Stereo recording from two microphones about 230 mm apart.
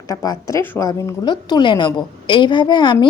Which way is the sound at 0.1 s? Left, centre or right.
Centre.